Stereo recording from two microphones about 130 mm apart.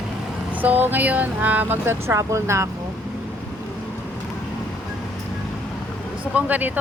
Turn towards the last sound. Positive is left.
turn(degrees=-15)  # may be behind; listen again after turning